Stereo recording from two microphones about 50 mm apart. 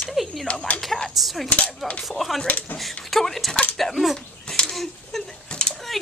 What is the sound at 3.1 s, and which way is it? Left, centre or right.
Speech, centre.